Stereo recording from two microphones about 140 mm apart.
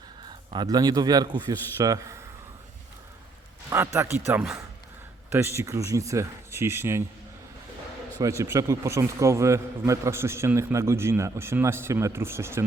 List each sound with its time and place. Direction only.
0.3 s a man's voice: 30° right (ahead or behind)
3.7 s a man's voice: 15° right (ahead or behind)
8.2 s a man's voice: 20° right (ahead or behind)